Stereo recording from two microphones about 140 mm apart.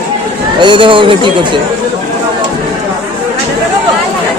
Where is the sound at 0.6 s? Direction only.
35° right (ahead or behind).